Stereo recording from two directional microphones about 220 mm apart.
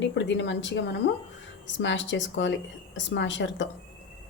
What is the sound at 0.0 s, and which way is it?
A woman's voice, 55° left (ahead or behind).